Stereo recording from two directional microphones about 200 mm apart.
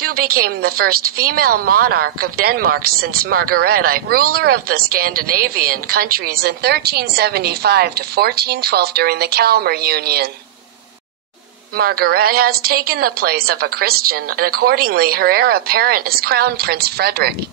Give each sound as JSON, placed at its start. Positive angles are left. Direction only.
{"t": 0.0, "sound": "a woman's voice", "side_deg": -50}
{"t": 11.7, "sound": "a woman's voice", "side_deg": -50}